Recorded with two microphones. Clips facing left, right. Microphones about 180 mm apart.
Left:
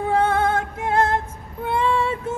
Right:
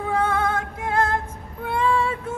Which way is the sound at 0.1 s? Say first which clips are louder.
Left 3 dB; 25° left (ahead or behind).